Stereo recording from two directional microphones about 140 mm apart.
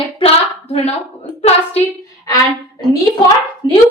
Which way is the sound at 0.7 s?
50° left (ahead or behind).